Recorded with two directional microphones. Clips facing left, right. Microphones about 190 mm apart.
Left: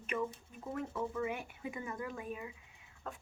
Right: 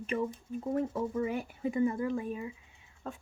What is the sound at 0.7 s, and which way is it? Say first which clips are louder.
A woman's voice: right 5 dB; 35° right (ahead or behind).